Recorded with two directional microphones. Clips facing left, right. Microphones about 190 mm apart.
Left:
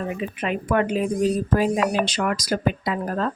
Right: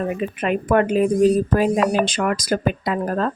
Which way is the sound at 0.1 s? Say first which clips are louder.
Right 4 dB; 50° right (ahead or behind).